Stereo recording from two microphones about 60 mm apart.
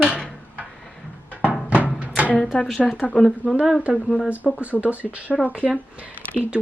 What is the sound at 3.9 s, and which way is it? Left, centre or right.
Speech, centre.